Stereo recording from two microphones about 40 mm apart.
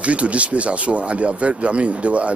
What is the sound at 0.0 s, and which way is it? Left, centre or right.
Speech, right.